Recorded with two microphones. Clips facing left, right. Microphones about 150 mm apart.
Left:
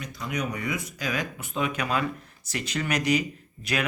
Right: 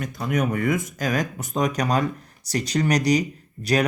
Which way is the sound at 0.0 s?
50° right (ahead or behind).